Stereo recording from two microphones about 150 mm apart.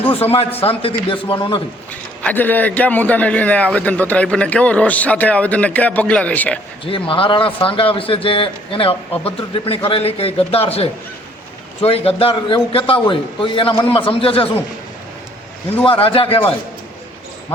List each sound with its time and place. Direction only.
0.1 s a man's voice: 40° left (ahead or behind)
1.9 s a man's voice: 10° left (ahead or behind)
6.8 s a man's voice: 35° left (ahead or behind)
15.8 s a man's voice: 35° left (ahead or behind)